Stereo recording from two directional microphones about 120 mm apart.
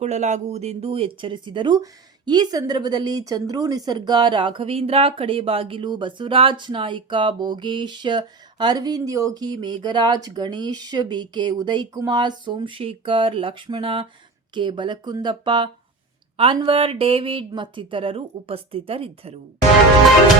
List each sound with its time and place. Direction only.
0.0 s speech: 70° right (ahead or behind); by 19.4 s 55° right (ahead or behind)